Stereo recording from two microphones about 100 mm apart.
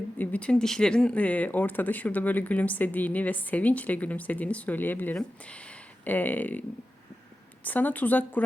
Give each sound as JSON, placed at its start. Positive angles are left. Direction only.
{"t": 0.2, "sound": "speech", "side_deg": 15}